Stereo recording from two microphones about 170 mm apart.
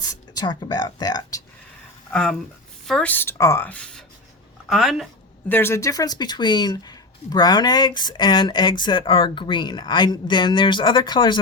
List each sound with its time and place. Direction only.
0.1 s speech: 25° left (ahead or behind)
2.0 s a woman's voice: 5° left (ahead or behind)
5.5 s speech: 15° left (ahead or behind)